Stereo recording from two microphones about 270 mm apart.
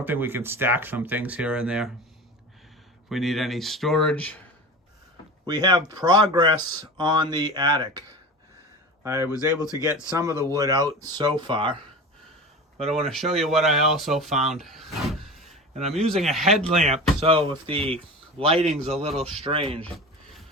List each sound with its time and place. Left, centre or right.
0.0 s speech: centre
3.1 s speech: centre
5.5 s speech: centre
9.0 s speech: centre
9.3 s speech: centre
10.5 s speech: centre
13.4 s speech: centre
14.5 s a sound: centre
16.0 s speech: centre
16.8 s speech: right
19.8 s a sound: centre